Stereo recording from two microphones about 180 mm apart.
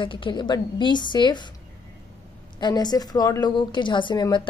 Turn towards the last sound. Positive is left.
turn(degrees=25)  # may be behind; listen again after turning